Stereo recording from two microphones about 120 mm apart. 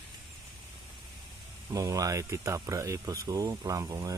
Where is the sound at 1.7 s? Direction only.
30° right (ahead or behind).